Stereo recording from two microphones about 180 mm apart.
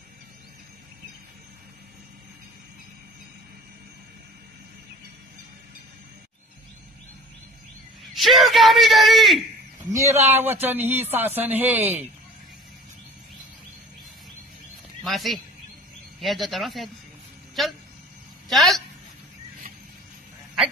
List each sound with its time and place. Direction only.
8.1 s speech: centre (ahead or behind)
9.8 s a man's voice: 20° right (ahead or behind)
15.0 s a woman's voice: centre (ahead or behind)